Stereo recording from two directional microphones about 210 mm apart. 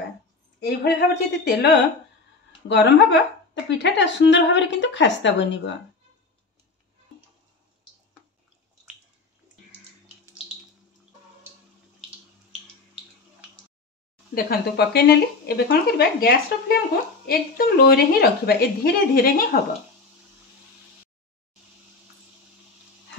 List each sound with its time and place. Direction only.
0.6 s speech: 50° left (ahead or behind)
2.7 s a woman's voice: 55° left (ahead or behind)
14.3 s speech: 50° left (ahead or behind)